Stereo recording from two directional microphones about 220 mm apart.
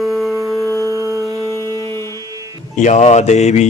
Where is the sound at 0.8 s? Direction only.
15° right (ahead or behind).